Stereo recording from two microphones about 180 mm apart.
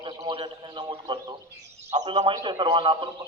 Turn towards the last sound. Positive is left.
turn(degrees=-30)  # may be behind; listen again after turning